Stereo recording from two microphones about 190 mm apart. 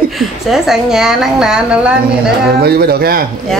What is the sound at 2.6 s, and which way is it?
Speech, 55° right (ahead or behind).